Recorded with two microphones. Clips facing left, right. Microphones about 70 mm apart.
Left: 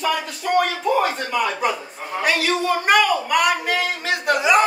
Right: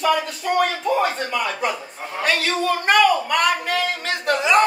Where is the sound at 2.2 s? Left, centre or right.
Centre.